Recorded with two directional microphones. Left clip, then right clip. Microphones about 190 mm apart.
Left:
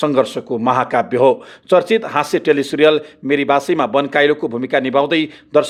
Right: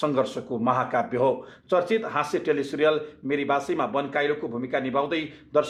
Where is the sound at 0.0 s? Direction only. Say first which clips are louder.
Left 9 dB; 40° left (ahead or behind).